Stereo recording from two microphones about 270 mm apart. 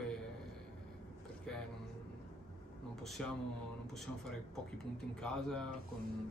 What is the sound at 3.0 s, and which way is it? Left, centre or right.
Speech, centre.